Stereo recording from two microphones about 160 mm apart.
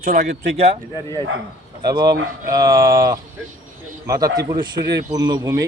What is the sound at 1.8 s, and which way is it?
A man's voice, 25° right (ahead or behind).